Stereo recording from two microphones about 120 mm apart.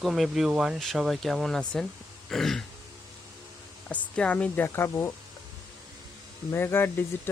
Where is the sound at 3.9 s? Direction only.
10° left (ahead or behind).